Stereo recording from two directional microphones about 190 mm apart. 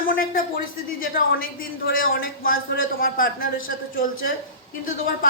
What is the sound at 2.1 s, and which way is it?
A woman's voice, 50° left (ahead or behind).